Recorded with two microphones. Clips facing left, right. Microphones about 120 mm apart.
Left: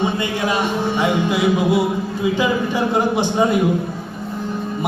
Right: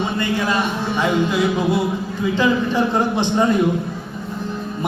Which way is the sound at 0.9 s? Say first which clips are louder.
Right 1 dB; 20° left (ahead or behind).